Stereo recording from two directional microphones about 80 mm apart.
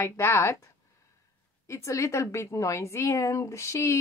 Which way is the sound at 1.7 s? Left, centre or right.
Left.